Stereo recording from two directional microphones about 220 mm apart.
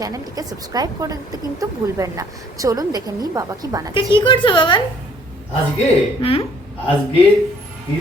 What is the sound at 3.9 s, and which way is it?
Speech, 20° left (ahead or behind).